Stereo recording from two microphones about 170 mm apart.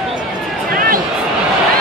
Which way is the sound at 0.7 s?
55° right (ahead or behind).